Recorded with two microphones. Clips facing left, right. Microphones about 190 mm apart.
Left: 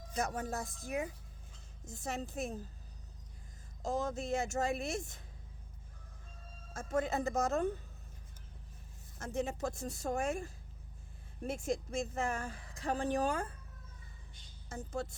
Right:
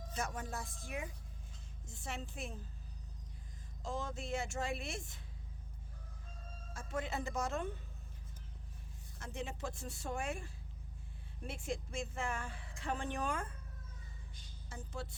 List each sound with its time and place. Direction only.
0.1 s a woman's voice: 40° left (ahead or behind)
3.8 s speech: 40° left (ahead or behind)
6.7 s speech: 45° left (ahead or behind)
9.1 s a woman's voice: 45° left (ahead or behind)
14.7 s speech: 45° left (ahead or behind)